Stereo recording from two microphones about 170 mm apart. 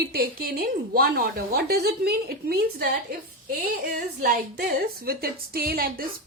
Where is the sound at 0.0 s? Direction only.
65° right (ahead or behind).